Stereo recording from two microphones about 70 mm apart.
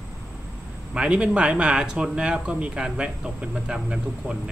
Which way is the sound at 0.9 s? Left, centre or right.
Centre.